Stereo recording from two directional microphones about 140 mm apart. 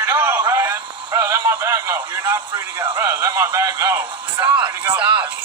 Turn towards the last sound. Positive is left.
turn(degrees=-20)  # may be behind; listen again after turning